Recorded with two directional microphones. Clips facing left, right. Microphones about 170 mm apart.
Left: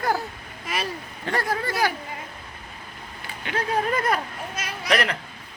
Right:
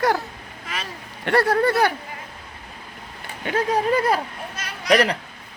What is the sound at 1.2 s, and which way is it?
Speech, 70° right (ahead or behind).